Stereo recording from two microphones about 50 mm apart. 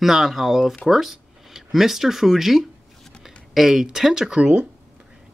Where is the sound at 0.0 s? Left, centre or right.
Centre.